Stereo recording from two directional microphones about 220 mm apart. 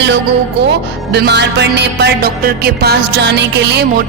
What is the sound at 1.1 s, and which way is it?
Music, 50° right (ahead or behind).